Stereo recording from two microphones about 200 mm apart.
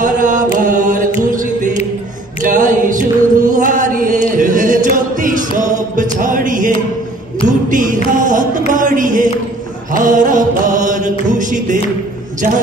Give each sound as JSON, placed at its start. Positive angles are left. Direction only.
{"t": 0.0, "sound": "chant", "side_deg": -40}
{"t": 6.2, "sound": "music", "side_deg": -40}
{"t": 7.4, "sound": "a sound", "side_deg": -40}
{"t": 9.9, "sound": "mantra", "side_deg": -40}